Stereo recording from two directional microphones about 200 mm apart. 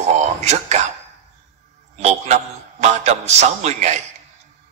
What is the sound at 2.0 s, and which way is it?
A man's voice, 35° right (ahead or behind).